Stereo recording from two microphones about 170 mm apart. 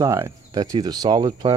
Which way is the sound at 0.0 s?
20° right (ahead or behind).